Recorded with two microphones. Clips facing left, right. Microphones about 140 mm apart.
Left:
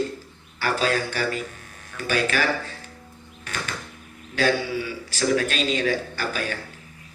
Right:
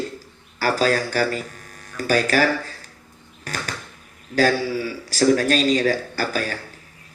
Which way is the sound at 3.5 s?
40° right (ahead or behind).